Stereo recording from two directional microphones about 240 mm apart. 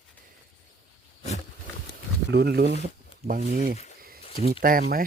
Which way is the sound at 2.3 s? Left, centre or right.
Right.